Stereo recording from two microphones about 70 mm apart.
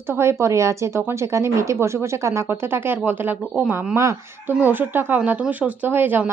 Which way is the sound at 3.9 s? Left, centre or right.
Right.